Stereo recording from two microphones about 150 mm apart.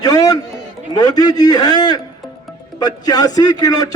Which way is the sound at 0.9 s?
25° left (ahead or behind).